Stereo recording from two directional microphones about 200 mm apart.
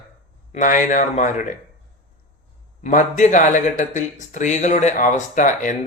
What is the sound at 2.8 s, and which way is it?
Speech, 40° left (ahead or behind).